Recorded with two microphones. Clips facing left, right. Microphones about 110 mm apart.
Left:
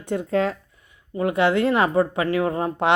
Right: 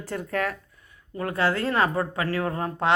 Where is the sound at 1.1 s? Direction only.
10° left (ahead or behind).